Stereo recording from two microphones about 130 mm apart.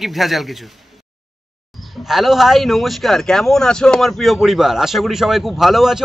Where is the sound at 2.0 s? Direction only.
Centre (ahead or behind).